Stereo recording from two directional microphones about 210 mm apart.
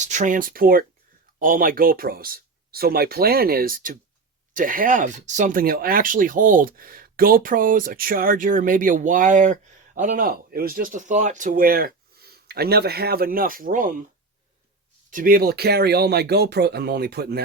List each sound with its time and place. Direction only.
0.0 s speech: 35° right (ahead or behind)
15.1 s speech: 45° right (ahead or behind)